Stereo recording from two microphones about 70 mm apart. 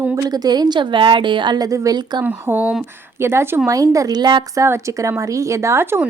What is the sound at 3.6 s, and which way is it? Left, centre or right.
Speech, right.